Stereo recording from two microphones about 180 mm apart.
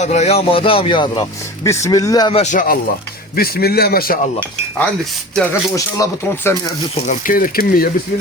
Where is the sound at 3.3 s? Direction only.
55° left (ahead or behind).